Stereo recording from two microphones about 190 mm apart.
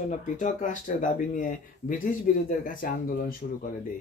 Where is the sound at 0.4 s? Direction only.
40° left (ahead or behind).